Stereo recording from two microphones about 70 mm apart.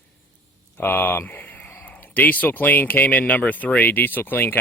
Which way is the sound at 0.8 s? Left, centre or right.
Left.